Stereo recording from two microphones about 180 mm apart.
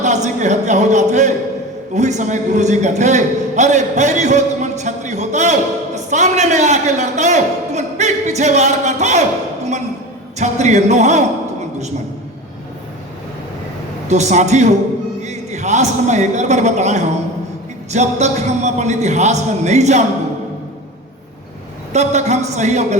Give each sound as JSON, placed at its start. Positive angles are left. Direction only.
{"t": 0.0, "sound": "a sound", "side_deg": -40}
{"t": 2.0, "sound": "a man's voice", "side_deg": -40}
{"t": 10.3, "sound": "a man's voice", "side_deg": -40}
{"t": 14.1, "sound": "a man's voice", "side_deg": -40}
{"t": 21.9, "sound": "a man's voice", "side_deg": -40}